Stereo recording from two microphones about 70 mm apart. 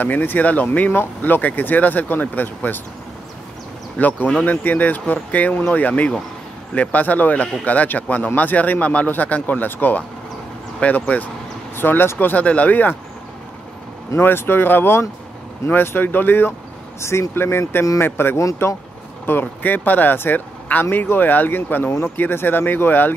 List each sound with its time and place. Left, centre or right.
0.0 s speech: left
4.0 s speech: left
14.1 s speech: left
17.0 s speech: left